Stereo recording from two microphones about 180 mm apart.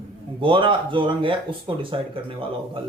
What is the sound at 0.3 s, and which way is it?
Speech, 30° right (ahead or behind).